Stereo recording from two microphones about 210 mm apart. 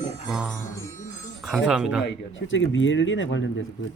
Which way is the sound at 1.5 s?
Centre (ahead or behind).